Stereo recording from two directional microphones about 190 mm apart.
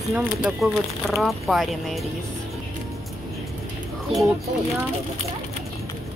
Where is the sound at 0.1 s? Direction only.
5° right (ahead or behind).